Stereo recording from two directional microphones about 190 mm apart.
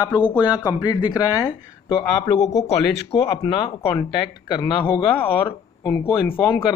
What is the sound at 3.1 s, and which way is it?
Speech, 30° left (ahead or behind).